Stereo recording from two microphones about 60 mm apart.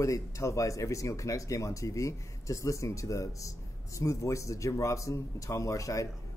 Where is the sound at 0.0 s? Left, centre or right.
Left.